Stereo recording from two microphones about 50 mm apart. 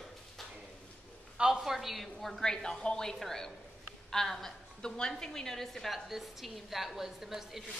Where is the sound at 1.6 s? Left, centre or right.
Centre.